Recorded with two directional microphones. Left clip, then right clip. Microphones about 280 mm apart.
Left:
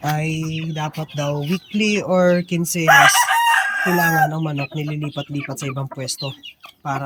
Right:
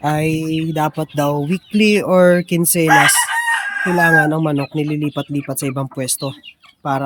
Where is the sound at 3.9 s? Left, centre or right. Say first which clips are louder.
Right 7 dB; centre.